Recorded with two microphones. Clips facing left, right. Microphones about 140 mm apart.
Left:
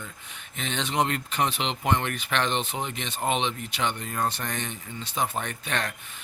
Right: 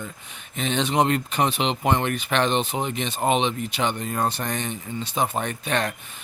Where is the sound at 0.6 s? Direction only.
20° right (ahead or behind).